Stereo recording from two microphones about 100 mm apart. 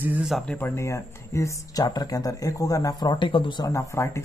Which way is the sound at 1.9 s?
40° left (ahead or behind).